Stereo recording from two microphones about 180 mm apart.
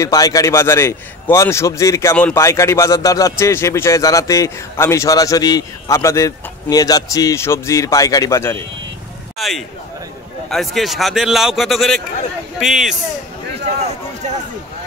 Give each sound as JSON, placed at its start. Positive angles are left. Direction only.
{"t": 0.0, "sound": "a man's voice", "side_deg": 20}
{"t": 9.4, "sound": "a man's voice", "side_deg": 0}